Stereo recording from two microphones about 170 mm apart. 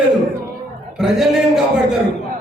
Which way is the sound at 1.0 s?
Centre (ahead or behind).